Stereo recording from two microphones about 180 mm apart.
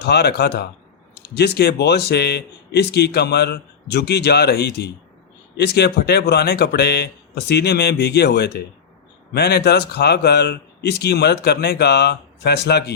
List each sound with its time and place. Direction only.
0.0 s speech: 65° left (ahead or behind)